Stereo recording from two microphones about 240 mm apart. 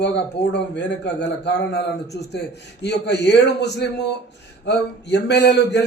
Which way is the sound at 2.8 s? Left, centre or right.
Left.